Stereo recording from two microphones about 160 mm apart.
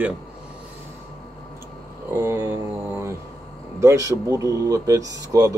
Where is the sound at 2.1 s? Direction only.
20° right (ahead or behind).